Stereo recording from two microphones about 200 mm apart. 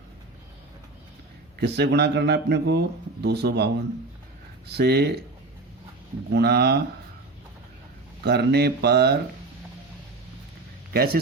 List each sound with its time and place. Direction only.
1.5 s speech: 55° right (ahead or behind)
4.7 s speech: 55° right (ahead or behind)
6.3 s speech: 55° right (ahead or behind)
8.2 s speech: 55° right (ahead or behind)
10.9 s speech: 50° right (ahead or behind)